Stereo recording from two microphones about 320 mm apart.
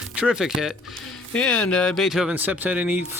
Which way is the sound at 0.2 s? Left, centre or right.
Centre.